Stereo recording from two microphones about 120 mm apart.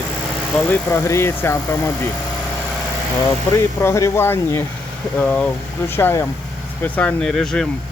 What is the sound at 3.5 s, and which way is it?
Speech, 25° left (ahead or behind).